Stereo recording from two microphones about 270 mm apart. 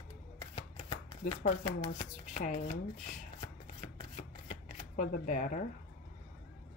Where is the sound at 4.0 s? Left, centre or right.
Left.